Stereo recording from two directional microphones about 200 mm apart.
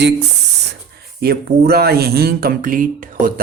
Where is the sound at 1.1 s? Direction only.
50° right (ahead or behind).